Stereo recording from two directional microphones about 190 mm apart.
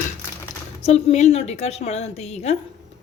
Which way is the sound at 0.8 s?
35° left (ahead or behind).